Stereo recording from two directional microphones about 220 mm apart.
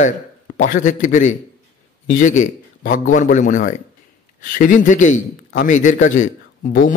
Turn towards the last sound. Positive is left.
turn(degrees=35)  # may be behind; listen again after turning